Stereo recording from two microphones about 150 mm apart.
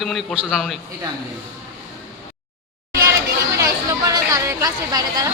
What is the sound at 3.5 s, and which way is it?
Chatter, 25° right (ahead or behind).